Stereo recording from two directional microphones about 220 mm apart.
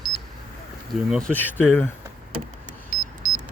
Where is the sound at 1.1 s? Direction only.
5° left (ahead or behind).